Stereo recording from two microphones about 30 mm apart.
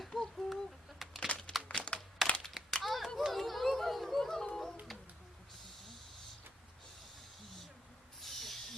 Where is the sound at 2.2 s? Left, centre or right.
Centre.